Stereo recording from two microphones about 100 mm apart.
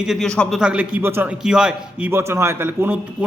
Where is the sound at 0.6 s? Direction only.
10° right (ahead or behind).